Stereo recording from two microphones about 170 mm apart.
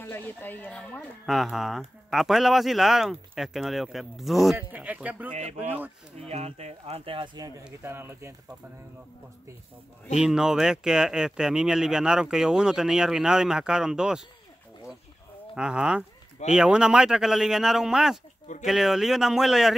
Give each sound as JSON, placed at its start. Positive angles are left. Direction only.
{"t": 0.0, "sound": "speech", "side_deg": 10}
{"t": 5.3, "sound": "speech", "side_deg": -40}
{"t": 5.6, "sound": "speech", "side_deg": -10}
{"t": 6.2, "sound": "speech", "side_deg": -40}
{"t": 10.1, "sound": "speech", "side_deg": -5}
{"t": 15.5, "sound": "speech", "side_deg": -5}